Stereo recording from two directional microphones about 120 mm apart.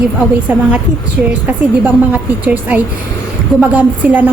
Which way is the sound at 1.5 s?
15° right (ahead or behind).